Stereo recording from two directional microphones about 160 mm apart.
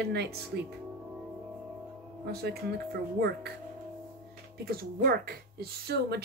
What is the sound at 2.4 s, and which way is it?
Speech, 85° right.